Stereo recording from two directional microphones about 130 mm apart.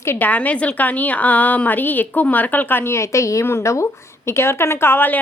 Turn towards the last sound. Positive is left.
turn(degrees=15)  # may be behind; listen again after turning